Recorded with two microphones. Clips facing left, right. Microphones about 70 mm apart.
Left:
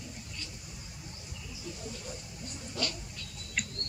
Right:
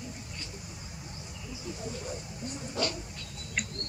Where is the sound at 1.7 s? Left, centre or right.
Right.